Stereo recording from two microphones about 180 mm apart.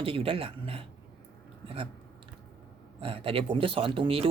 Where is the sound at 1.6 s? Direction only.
30° right (ahead or behind).